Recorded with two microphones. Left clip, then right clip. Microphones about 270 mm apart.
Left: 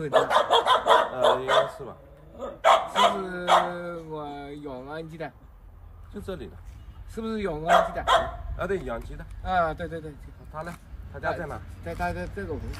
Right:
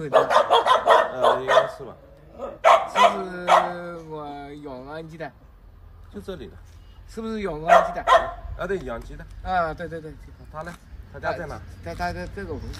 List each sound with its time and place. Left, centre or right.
0.1 s dog: right
3.2 s speech: centre
3.4 s dog: right
3.7 s a sound: centre
6.2 s speech: centre
7.6 s speech: right
8.5 s speech: centre